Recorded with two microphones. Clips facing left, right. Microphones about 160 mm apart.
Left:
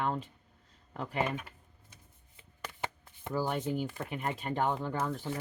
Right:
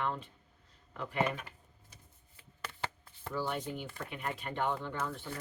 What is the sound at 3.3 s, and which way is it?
Speech, 40° left (ahead or behind).